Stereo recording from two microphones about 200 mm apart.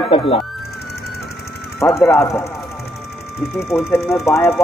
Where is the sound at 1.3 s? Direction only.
55° left (ahead or behind).